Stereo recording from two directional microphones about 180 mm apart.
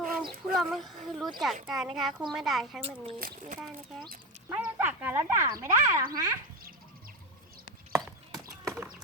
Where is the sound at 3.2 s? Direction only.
50° right (ahead or behind).